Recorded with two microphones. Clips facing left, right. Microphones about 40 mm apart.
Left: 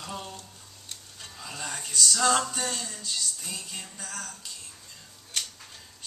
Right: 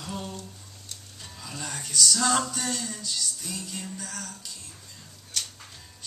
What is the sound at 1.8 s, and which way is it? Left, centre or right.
Music, centre.